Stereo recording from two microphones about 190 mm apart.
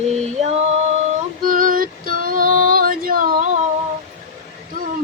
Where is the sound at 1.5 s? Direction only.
45° right (ahead or behind).